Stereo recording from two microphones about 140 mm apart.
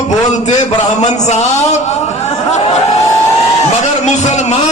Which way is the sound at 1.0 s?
55° left (ahead or behind).